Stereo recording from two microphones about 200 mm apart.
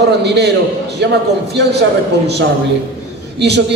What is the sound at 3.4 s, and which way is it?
Speech, 60° right (ahead or behind).